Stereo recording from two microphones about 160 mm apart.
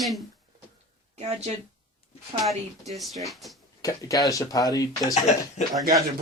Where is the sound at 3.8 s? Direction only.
20° left (ahead or behind).